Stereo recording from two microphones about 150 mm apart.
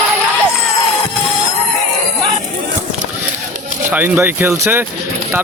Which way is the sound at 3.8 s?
15° right (ahead or behind).